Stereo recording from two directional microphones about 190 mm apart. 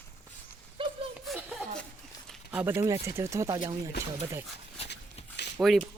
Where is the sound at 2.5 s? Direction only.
10° right (ahead or behind).